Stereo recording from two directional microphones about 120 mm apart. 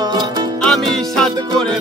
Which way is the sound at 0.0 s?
35° right (ahead or behind).